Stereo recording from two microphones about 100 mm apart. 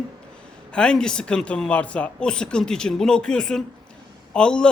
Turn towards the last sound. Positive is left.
turn(degrees=10)  # may be behind; listen again after turning